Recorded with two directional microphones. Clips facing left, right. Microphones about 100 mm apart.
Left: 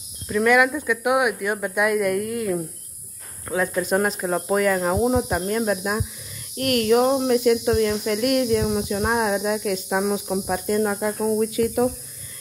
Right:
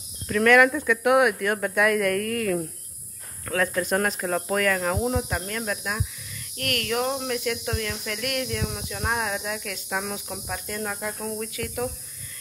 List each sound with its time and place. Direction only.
0.3 s speech: 10° left (ahead or behind)